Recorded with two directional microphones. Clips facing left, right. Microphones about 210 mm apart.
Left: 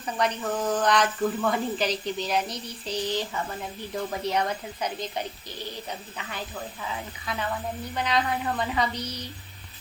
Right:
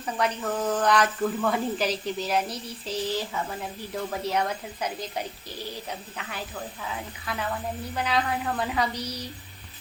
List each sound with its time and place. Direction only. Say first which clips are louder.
0.0 s speech: even; centre (ahead or behind)
6.8 s speech: left 1 dB; centre (ahead or behind)
9.0 s a woman's voice: right 1 dB; 35° right (ahead or behind)